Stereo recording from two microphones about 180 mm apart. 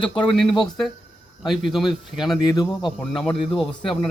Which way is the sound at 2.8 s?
Centre (ahead or behind).